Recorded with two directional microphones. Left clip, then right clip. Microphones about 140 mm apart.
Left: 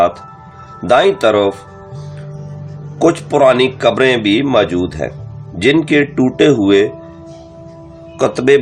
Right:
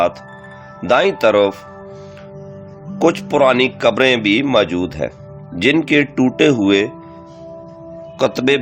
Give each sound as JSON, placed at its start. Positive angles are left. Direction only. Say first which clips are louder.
{"t": 0.9, "sound": "speech", "louder": "left 3 dB", "side_deg": -35}
{"t": 3.0, "sound": "speech", "louder": "left 3 dB", "side_deg": -35}
{"t": 8.2, "sound": "speech", "louder": "left 4 dB", "side_deg": -25}